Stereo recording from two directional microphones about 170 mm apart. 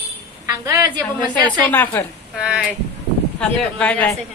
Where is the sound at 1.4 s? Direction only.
10° left (ahead or behind).